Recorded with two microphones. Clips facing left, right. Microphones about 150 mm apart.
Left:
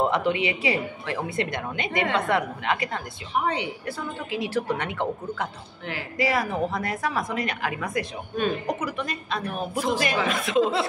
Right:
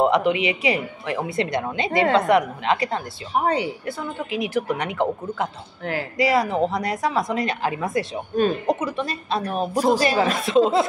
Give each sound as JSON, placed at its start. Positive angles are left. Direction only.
{"t": 0.0, "sound": "a woman's voice", "side_deg": -20}
{"t": 3.3, "sound": "a woman's voice", "side_deg": -40}
{"t": 4.3, "sound": "a woman's voice", "side_deg": -15}